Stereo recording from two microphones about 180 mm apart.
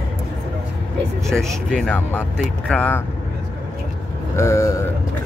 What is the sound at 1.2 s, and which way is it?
Speech, centre (ahead or behind).